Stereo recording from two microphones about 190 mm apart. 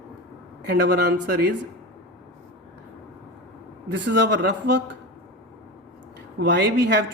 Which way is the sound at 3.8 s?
70° right (ahead or behind).